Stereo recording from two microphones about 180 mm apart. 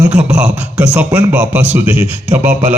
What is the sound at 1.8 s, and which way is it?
Speech, 30° left (ahead or behind).